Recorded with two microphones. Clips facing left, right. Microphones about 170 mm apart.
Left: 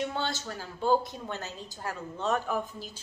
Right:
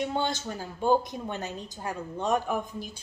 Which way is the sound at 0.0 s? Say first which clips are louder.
Right 3 dB; 15° right (ahead or behind).